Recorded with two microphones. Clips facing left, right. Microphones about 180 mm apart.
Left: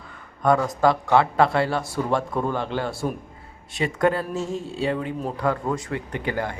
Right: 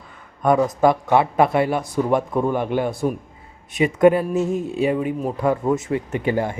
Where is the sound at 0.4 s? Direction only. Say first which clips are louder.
Right 3 dB; 20° right (ahead or behind).